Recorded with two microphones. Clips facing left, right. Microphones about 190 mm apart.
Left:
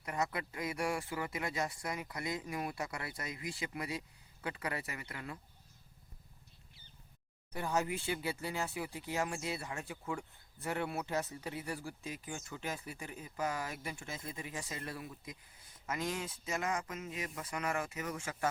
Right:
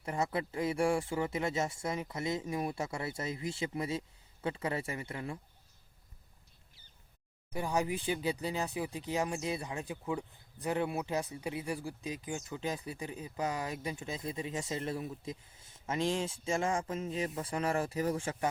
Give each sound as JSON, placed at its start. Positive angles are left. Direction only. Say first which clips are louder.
{"t": 0.0, "sound": "speech", "louder": "right 3 dB", "side_deg": -30}
{"t": 7.5, "sound": "speech", "louder": "right 2 dB", "side_deg": -15}